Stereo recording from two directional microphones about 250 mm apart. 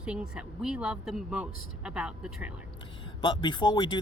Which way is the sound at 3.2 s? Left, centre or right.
Centre.